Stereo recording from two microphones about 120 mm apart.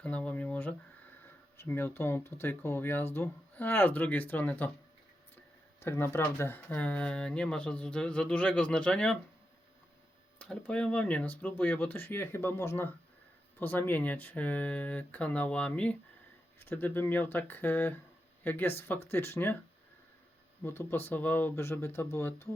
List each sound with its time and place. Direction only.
0.0 s a sound: 10° left (ahead or behind)
1.5 s speech: 20° left (ahead or behind)
5.8 s speech: 20° left (ahead or behind)
10.3 s speech: 10° left (ahead or behind)
20.6 s speech: 20° left (ahead or behind)